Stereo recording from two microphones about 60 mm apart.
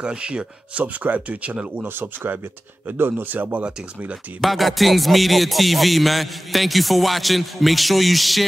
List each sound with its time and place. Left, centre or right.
0.0 s speech: centre
1.8 s speech: right
3.6 s speech: centre
4.4 s music: centre